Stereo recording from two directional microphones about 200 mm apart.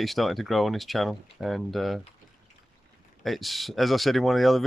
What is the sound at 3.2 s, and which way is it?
Speech, centre (ahead or behind).